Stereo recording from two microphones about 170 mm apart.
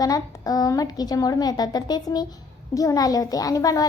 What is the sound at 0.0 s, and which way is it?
A woman's voice, 20° left (ahead or behind).